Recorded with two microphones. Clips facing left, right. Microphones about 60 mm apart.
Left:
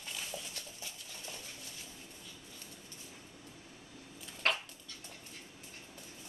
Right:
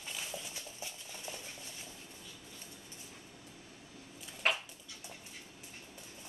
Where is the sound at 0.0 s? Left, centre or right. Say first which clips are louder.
Even; centre.